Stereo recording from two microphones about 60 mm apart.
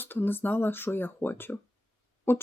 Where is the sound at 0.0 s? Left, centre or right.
Left.